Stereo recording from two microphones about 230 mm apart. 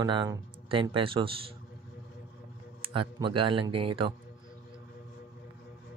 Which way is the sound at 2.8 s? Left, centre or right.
Right.